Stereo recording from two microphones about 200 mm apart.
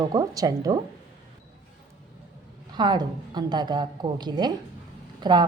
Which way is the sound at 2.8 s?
20° right (ahead or behind).